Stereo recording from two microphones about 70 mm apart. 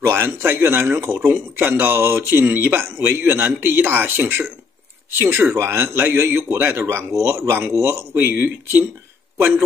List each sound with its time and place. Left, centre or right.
0.0 s a man's voice: right